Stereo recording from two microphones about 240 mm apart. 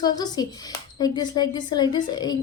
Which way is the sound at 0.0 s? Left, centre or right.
Centre.